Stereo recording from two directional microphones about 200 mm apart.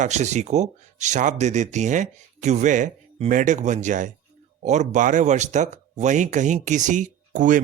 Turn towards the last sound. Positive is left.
turn(degrees=-40)  # may be behind; listen again after turning